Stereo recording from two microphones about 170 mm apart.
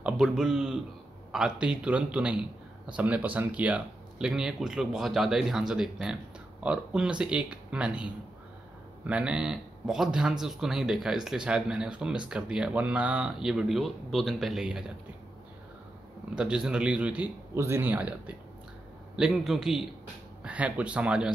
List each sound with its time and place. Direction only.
0.0 s a man's voice: 5° right (ahead or behind)
16.3 s a man's voice: 5° right (ahead or behind)